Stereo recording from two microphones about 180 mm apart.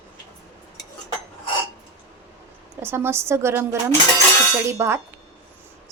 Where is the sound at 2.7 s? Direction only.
15° right (ahead or behind).